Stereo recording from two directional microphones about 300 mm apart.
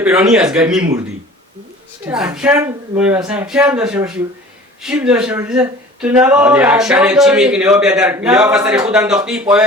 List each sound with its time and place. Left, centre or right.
0.0 s speech: centre
2.0 s speech: centre